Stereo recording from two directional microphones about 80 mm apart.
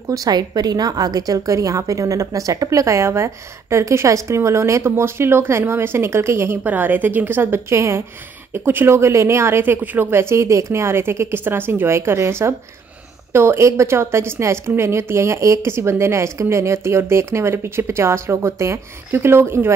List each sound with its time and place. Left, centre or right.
0.1 s a woman's voice: right
6.6 s a woman's voice: right